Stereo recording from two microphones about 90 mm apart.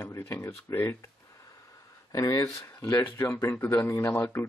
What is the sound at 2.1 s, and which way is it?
Speech, 35° left (ahead or behind).